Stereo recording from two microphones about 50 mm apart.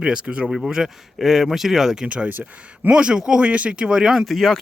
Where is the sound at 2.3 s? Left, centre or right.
Right.